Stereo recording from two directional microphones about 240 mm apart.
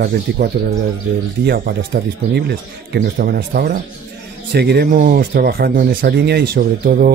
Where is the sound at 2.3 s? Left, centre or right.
Right.